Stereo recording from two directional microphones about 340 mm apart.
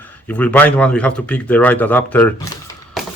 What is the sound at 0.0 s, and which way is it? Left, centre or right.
Speech, centre.